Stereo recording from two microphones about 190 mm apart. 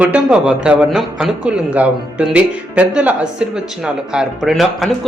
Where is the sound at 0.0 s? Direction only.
5° right (ahead or behind).